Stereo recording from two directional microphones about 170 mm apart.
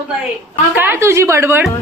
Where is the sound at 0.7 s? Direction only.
10° right (ahead or behind).